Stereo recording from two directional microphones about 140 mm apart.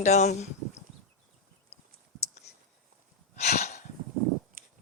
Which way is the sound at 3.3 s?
55° left (ahead or behind).